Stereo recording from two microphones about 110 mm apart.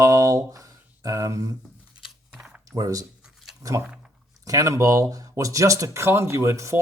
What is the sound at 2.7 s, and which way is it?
Speech, 35° right (ahead or behind).